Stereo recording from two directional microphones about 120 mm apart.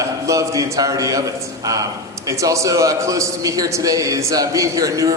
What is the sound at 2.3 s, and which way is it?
A man's voice, 25° right (ahead or behind).